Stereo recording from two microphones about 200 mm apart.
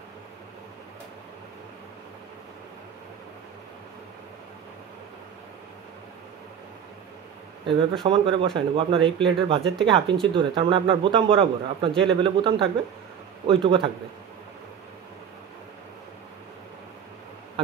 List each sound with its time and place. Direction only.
8.0 s speech: 25° right (ahead or behind)